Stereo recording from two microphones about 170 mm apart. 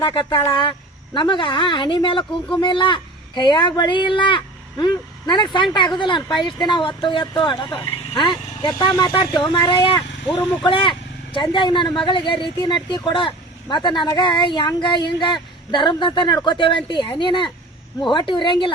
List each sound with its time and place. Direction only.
0.0 s speech: 30° left (ahead or behind)